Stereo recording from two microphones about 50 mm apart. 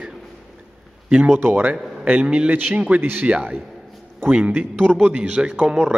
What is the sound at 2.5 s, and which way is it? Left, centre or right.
A man's voice, right.